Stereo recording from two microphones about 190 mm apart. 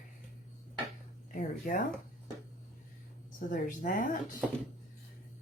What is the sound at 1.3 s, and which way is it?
Speech, 45° left (ahead or behind).